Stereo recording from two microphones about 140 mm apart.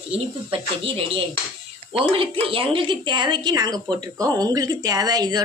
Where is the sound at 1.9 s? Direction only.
40° right (ahead or behind).